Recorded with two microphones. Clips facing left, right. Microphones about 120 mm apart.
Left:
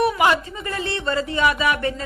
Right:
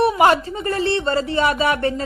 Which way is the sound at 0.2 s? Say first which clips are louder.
Right 4 dB; 35° right (ahead or behind).